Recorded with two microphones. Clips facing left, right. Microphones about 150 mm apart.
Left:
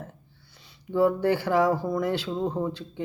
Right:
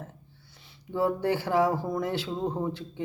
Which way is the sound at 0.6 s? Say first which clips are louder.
Left 5 dB; 25° right (ahead or behind).